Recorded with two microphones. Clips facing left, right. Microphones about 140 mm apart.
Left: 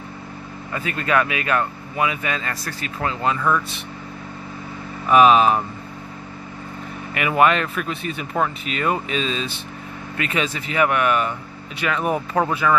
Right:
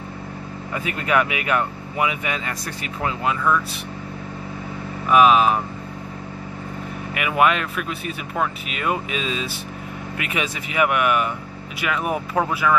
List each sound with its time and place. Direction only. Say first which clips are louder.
0.7 s speech: even; 15° right (ahead or behind)
5.1 s speech: left 1 dB; 5° right (ahead or behind)
7.2 s speech: left 2 dB; 5° right (ahead or behind)